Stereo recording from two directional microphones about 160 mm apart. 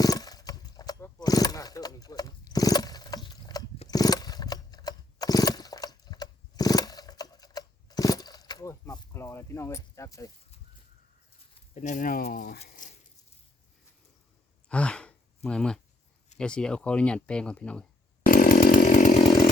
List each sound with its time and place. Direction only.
0.0 s a sound: 25° left (ahead or behind)
11.7 s speech: 50° left (ahead or behind); by 12.5 s 65° left (ahead or behind)
12.6 s speech: 55° left (ahead or behind)
14.7 s a sound: 5° left (ahead or behind)
15.4 s speech: 5° left (ahead or behind)
18.3 s chainsaw: 60° left (ahead or behind)